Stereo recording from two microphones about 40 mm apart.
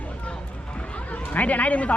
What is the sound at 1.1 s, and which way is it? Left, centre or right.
Speech, left.